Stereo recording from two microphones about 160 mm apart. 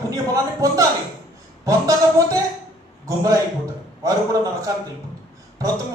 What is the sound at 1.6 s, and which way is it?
A man's voice, 20° right (ahead or behind).